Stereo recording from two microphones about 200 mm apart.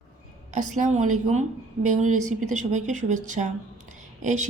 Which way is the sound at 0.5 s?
40° right (ahead or behind).